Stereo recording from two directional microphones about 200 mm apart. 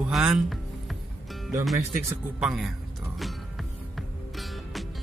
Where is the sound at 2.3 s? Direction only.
Centre (ahead or behind).